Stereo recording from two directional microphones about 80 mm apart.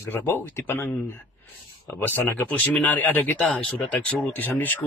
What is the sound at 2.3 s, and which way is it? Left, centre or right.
Speech, left.